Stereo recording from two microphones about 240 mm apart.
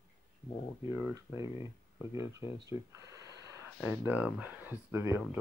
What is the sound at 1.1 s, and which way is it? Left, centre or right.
Speech, centre.